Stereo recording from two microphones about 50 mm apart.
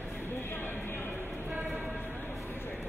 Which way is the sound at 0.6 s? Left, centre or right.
Left.